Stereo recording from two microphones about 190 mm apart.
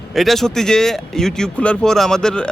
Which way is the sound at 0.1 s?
Centre (ahead or behind).